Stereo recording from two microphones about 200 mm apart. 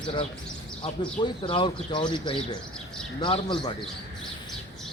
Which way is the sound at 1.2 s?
25° left (ahead or behind).